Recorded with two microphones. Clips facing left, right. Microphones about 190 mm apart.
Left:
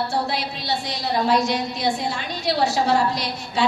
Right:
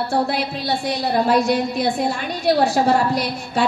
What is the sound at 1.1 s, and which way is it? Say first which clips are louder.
A woman's voice: right 3 dB; 55° right (ahead or behind).